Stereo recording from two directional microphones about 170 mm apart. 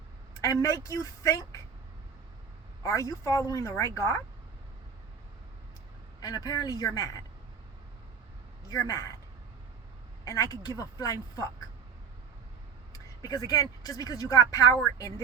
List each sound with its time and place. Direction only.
0.4 s a woman's voice: 20° left (ahead or behind)
2.8 s a woman's voice: 20° left (ahead or behind)
6.1 s a woman's voice: 25° left (ahead or behind)
8.6 s a woman's voice: 20° left (ahead or behind)
10.2 s a woman's voice: 20° left (ahead or behind)
12.9 s speech: 20° left (ahead or behind)